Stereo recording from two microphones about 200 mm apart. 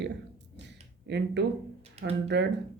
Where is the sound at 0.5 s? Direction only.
60° right (ahead or behind).